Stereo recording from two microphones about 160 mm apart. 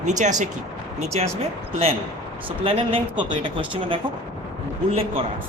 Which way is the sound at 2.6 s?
35° right (ahead or behind).